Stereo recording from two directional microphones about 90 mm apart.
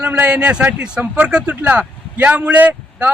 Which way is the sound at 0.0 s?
15° right (ahead or behind).